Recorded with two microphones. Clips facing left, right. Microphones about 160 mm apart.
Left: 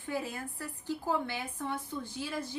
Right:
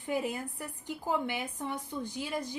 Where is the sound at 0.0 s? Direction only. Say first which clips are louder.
Right 3 dB; 15° right (ahead or behind).